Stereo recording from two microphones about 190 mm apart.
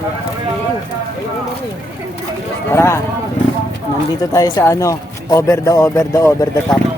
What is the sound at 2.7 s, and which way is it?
Speech, 15° left (ahead or behind).